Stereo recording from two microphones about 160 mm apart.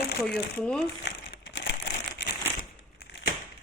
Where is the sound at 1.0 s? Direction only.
90° left.